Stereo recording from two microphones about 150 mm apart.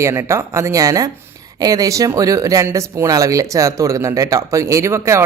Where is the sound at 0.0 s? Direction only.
20° right (ahead or behind).